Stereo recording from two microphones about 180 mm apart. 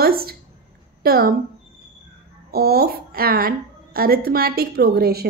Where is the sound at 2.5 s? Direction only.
60° right (ahead or behind).